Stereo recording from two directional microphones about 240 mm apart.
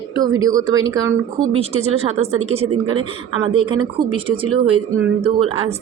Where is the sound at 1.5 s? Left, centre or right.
Right.